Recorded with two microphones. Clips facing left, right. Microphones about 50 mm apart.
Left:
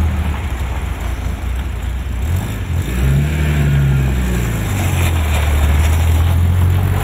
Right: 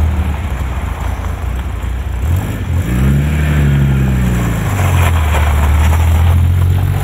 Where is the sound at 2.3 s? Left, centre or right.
Right.